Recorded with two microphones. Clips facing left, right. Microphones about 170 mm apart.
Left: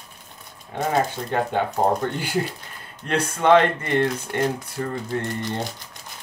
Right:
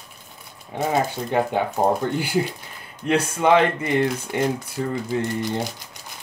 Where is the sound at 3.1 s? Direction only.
10° right (ahead or behind).